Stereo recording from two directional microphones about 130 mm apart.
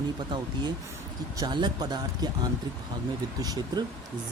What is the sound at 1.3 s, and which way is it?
Speech, 30° right (ahead or behind).